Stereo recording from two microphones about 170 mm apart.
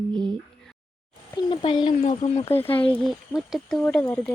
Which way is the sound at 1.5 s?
30° left (ahead or behind).